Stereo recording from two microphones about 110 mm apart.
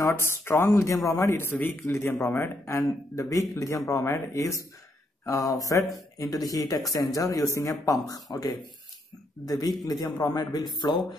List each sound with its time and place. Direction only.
0.1 s speech: 20° left (ahead or behind); by 11.0 s 40° left (ahead or behind)